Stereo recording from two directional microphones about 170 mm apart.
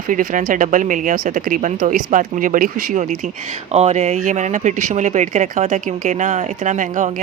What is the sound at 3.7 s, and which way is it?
Speech, 40° right (ahead or behind).